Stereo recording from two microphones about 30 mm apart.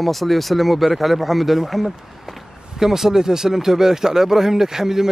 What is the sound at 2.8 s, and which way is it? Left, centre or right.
Speech, centre.